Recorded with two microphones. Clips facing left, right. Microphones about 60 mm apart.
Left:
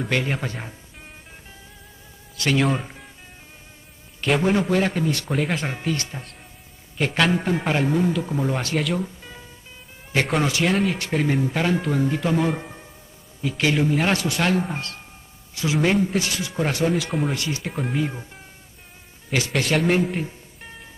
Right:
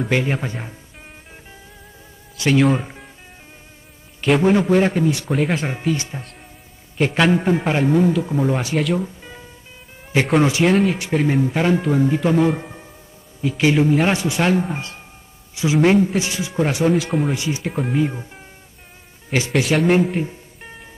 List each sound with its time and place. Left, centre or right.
0.0 s a man's voice: centre
2.5 s a man's voice: centre
4.2 s a man's voice: centre
15.7 s a man's voice: centre
16.2 s speech: centre
16.9 s a man's voice: centre
17.4 s speech: centre
17.6 s a man's voice: centre
19.5 s speech: centre